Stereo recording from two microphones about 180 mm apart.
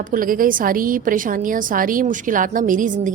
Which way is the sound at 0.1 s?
50° right (ahead or behind).